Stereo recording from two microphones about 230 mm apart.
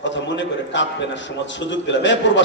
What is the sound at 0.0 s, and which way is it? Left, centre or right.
A man's voice, left.